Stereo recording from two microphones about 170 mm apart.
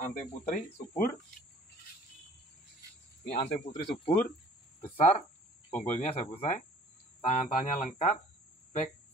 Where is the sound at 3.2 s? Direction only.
90° left.